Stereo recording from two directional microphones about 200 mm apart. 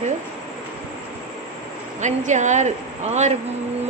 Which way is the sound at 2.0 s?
35° right (ahead or behind).